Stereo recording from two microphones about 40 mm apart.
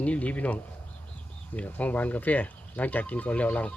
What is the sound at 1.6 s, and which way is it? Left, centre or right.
Speech, left.